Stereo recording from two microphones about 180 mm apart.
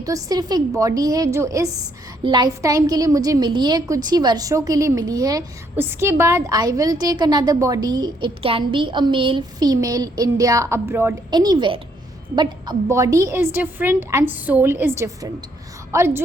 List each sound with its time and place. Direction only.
0.0 s a woman's voice: 20° right (ahead or behind)
11.3 s a woman's voice: 25° right (ahead or behind)